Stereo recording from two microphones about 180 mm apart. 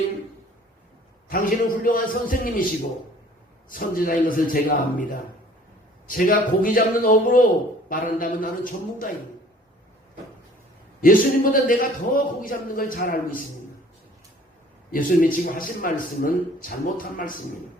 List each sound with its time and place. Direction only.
1.3 s a man's voice: 50° left (ahead or behind)
3.7 s a man's voice: 50° left (ahead or behind)
6.1 s a man's voice: 50° left (ahead or behind)
11.0 s a man's voice: 50° left (ahead or behind)
14.9 s a man's voice: 50° left (ahead or behind)